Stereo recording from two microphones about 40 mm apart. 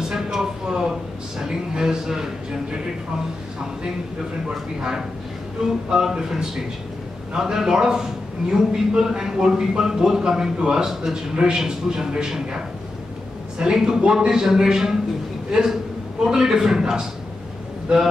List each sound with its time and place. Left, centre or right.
0.0 s a sound: centre
1.4 s a man's voice: centre
5.9 s a man's voice: centre